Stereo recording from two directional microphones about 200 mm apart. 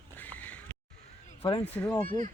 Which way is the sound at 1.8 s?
10° left (ahead or behind).